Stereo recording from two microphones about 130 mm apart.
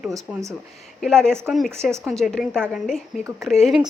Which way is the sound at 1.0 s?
5° left (ahead or behind).